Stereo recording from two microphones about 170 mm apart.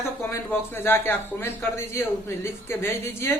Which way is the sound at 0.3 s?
15° left (ahead or behind).